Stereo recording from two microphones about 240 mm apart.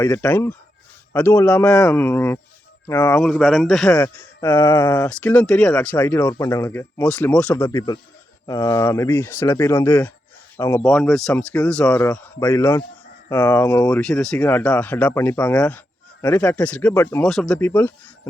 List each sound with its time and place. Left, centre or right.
0.0 s speech: centre
5.0 s speech: centre
7.6 s speech: centre